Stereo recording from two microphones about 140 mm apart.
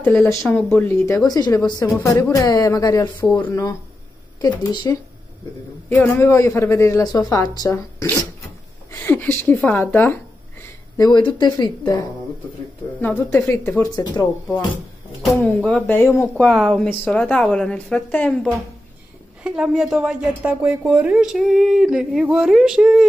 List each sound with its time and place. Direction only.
0.0 s a woman's voice: 5° left (ahead or behind); by 4.9 s 30° left (ahead or behind)
5.9 s a woman's voice: 15° left (ahead or behind)
9.0 s a sound: 15° left (ahead or behind)
9.8 s a woman's voice: 15° left (ahead or behind)
11.0 s speech: 30° left (ahead or behind)
13.0 s a woman's voice: 15° left (ahead or behind)
13.8 s a woman's voice: 30° left (ahead or behind)
15.3 s a woman's voice: 10° left (ahead or behind)
16.3 s a woman's voice: centre (ahead or behind)
19.4 s speech: 5° right (ahead or behind)